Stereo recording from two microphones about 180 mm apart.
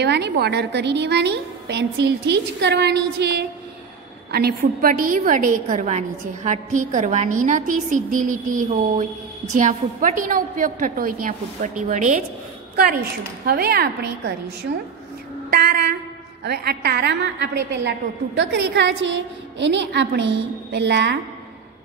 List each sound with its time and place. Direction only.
0.0 s a woman's voice: 65° right (ahead or behind); by 12.3 s 45° right (ahead or behind)
13.5 s a woman's voice: 60° right (ahead or behind)
15.5 s a woman's voice: 60° right (ahead or behind)